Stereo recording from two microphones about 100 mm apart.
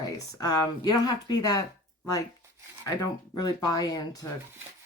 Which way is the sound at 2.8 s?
40° left (ahead or behind).